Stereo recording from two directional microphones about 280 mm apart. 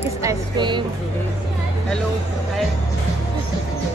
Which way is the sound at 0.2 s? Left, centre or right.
Centre.